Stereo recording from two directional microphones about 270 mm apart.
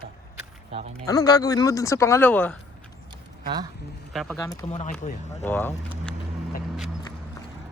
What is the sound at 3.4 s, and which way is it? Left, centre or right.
Speech, centre.